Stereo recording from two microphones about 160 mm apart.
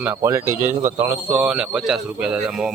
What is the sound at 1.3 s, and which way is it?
Speech, 5° right (ahead or behind).